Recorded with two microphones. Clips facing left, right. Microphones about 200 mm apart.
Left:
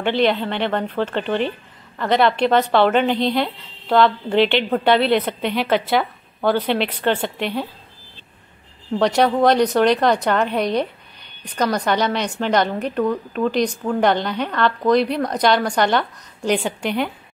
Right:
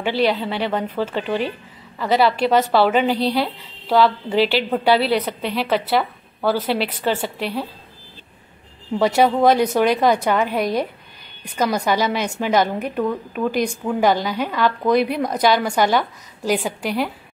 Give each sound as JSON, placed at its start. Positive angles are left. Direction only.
{"t": 0.0, "sound": "a woman's voice", "side_deg": -5}
{"t": 8.9, "sound": "a woman's voice", "side_deg": -5}